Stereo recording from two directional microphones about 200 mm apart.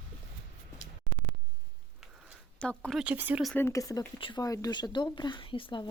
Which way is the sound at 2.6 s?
5° left (ahead or behind).